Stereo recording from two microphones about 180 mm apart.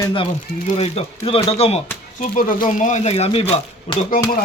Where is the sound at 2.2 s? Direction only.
45° left (ahead or behind).